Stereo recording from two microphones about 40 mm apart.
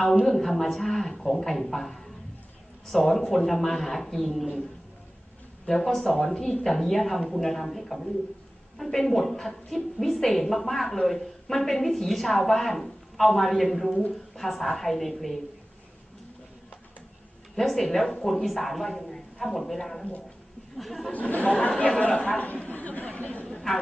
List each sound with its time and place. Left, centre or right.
0.2 s a woman's voice: centre
5.7 s a woman's voice: centre
17.6 s a woman's voice: centre
21.1 s speech: left
21.5 s speech: centre
22.7 s speech: left